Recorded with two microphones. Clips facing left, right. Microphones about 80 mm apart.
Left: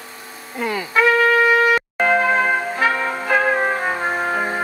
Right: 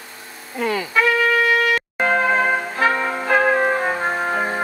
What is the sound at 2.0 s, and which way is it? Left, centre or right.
Trumpet, centre.